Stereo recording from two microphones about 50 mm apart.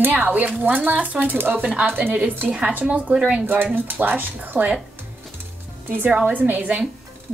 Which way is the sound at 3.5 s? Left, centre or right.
Right.